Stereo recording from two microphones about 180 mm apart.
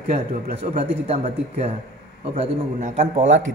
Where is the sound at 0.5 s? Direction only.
35° right (ahead or behind).